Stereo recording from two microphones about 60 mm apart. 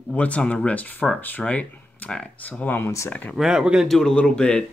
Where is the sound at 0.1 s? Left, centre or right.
Centre.